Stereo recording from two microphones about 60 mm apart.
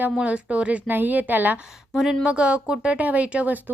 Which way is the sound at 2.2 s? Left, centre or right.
Centre.